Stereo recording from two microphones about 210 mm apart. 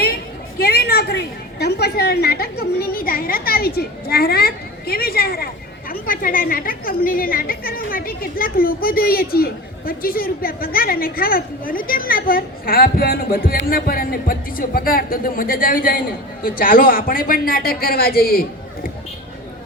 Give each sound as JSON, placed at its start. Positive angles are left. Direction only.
{"t": 0.6, "sound": "a woman's voice", "side_deg": 50}